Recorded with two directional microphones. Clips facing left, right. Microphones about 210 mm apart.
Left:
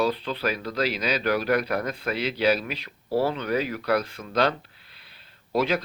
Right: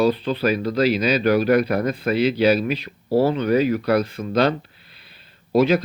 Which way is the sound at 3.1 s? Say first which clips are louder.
Right 6 dB; 40° right (ahead or behind).